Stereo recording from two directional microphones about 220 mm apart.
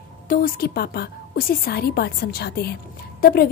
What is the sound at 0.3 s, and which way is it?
A woman's voice, 40° left (ahead or behind).